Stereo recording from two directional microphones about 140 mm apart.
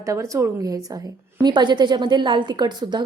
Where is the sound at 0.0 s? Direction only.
20° right (ahead or behind).